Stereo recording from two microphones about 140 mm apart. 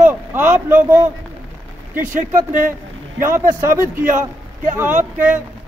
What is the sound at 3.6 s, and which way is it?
Speech, 20° right (ahead or behind).